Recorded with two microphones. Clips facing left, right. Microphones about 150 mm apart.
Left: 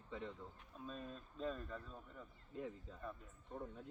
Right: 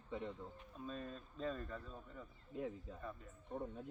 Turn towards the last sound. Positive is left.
turn(degrees=-15)  # may be behind; listen again after turning